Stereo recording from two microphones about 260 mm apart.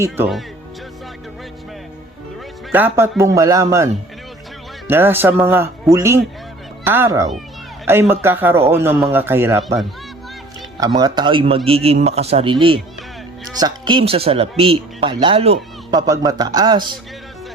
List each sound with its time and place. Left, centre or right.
0.0 s speech: centre
2.7 s speech: centre
4.9 s speech: centre
10.8 s speech: centre